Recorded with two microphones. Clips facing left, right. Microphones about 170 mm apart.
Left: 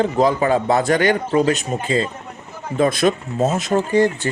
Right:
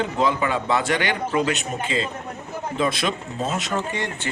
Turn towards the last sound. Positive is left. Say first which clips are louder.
# left 11 dB
turn(degrees=35)  # may be behind; listen again after turning